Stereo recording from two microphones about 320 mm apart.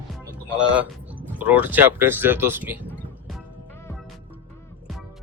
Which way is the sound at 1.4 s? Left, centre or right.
Centre.